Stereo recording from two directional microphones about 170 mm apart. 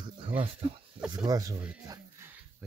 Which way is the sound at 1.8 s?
20° right (ahead or behind).